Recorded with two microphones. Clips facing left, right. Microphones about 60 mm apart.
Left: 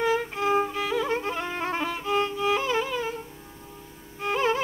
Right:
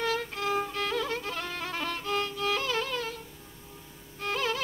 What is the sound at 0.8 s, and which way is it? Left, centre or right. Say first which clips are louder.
Music: left 4 dB; centre.